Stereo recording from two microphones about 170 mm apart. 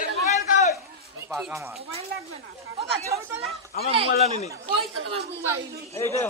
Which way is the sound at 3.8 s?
65° left (ahead or behind).